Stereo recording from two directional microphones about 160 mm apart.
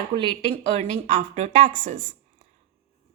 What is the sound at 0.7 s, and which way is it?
Speech, 45° right (ahead or behind).